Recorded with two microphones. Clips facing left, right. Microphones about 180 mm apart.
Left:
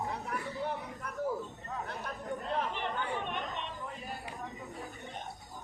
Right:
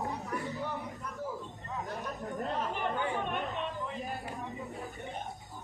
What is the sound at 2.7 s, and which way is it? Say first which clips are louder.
Chatter: right 3 dB; 45° right (ahead or behind).